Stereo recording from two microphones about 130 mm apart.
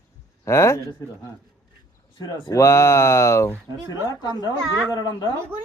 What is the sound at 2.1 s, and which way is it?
Speech, 30° left (ahead or behind).